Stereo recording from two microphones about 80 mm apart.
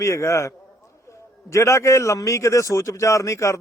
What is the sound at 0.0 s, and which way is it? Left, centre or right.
A man's voice, left.